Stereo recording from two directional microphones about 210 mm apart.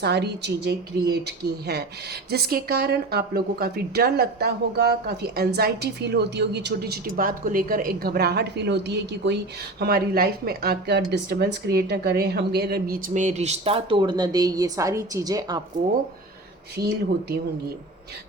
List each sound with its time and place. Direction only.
0.0 s a woman's voice: 50° right (ahead or behind); by 15.6 s 20° right (ahead or behind)
16.7 s a woman's voice: 50° right (ahead or behind)